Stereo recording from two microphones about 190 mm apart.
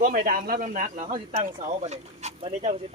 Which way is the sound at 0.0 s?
45° right (ahead or behind).